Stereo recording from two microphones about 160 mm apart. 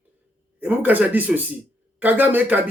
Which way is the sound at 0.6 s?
10° right (ahead or behind).